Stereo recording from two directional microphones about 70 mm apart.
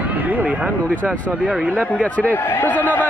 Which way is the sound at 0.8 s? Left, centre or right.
Left.